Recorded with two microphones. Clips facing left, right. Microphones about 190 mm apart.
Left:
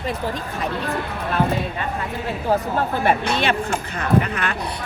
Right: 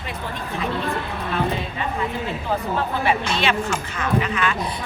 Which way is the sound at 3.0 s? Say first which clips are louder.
Left 2 dB; 55° left (ahead or behind).